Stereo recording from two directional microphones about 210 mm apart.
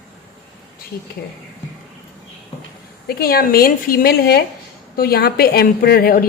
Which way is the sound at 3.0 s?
45° left (ahead or behind).